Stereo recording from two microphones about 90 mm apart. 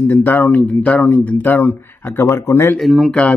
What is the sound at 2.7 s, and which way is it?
Speech, centre (ahead or behind).